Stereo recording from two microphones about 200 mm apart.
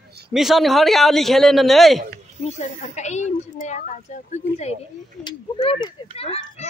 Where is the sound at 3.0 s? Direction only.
35° left (ahead or behind).